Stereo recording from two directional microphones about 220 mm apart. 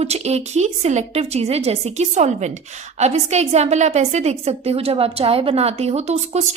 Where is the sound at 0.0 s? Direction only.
30° right (ahead or behind).